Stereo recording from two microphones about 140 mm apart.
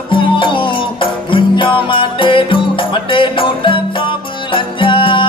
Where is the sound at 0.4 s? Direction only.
35° left (ahead or behind).